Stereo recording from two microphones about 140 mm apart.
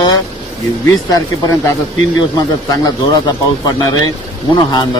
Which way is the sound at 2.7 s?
30° left (ahead or behind).